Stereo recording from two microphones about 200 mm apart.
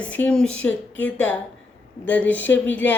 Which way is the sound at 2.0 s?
10° left (ahead or behind).